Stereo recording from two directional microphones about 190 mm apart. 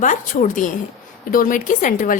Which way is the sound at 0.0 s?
40° left (ahead or behind).